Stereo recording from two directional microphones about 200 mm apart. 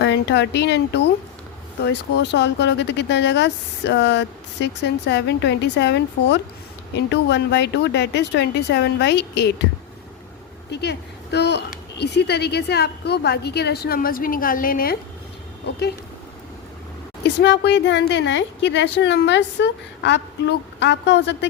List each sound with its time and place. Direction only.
0.0 s speech: 60° left (ahead or behind)
10.7 s speech: 55° left (ahead or behind)
17.2 s speech: 60° left (ahead or behind)